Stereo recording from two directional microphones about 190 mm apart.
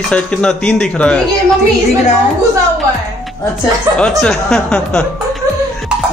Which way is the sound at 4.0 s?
5° left (ahead or behind).